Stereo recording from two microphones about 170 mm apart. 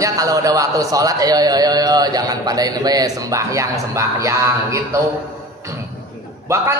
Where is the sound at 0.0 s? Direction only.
20° right (ahead or behind).